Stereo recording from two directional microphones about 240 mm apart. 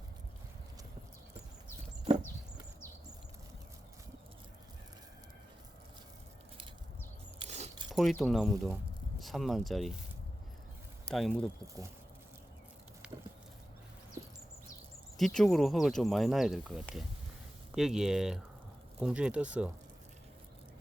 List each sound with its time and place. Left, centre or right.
7.4 s keys jangling: right
7.9 s speech: centre
11.1 s speech: centre
15.2 s speech: centre